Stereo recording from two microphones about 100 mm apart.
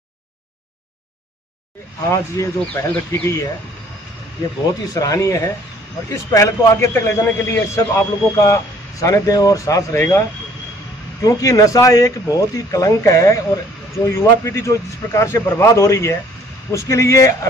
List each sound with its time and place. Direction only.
2.0 s speech: 30° left (ahead or behind)
4.9 s speech: 35° left (ahead or behind)
11.2 s speech: 35° left (ahead or behind)